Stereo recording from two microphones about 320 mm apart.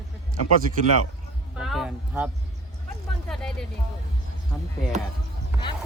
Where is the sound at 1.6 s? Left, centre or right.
Centre.